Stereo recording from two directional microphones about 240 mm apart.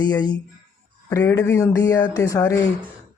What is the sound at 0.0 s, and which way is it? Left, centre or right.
Speech, centre.